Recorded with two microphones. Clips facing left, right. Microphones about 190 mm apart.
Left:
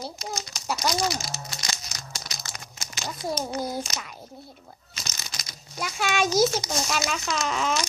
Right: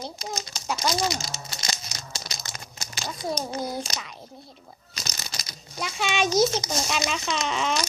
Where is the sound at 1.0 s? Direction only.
25° right (ahead or behind).